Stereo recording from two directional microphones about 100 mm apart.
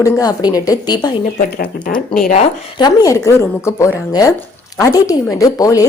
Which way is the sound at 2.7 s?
40° left (ahead or behind).